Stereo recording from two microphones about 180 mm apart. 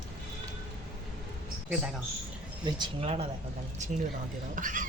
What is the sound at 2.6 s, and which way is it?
Speech, 30° right (ahead or behind).